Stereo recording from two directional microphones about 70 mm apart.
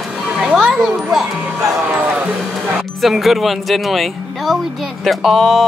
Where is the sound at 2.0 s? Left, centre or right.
Centre.